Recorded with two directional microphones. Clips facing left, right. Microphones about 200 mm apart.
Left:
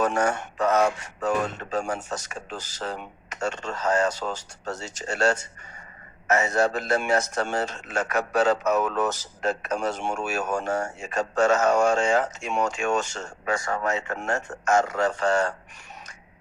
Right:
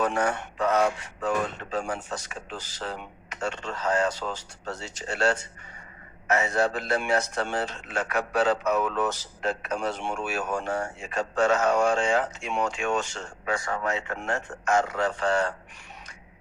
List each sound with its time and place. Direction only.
0.0 s speech: 45° left (ahead or behind)